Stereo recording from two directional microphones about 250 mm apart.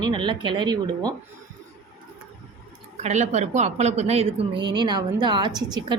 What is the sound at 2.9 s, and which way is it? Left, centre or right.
Speech, right.